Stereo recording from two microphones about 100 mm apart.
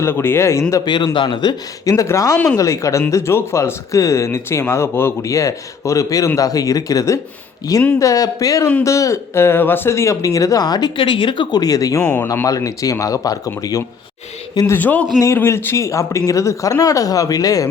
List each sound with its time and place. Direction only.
0.0 s speech: 25° left (ahead or behind)
0.9 s speech: 50° left (ahead or behind)
11.6 s speech: 35° left (ahead or behind)
12.0 s speech: 20° left (ahead or behind)
12.3 s speech: 35° left (ahead or behind)
14.7 s a man's voice: 15° left (ahead or behind)
15.2 s speech: 30° left (ahead or behind)